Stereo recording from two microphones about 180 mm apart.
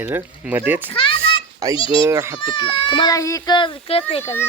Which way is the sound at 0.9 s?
30° left (ahead or behind).